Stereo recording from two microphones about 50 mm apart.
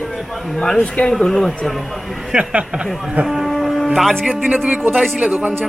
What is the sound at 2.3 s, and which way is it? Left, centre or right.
Speech, right.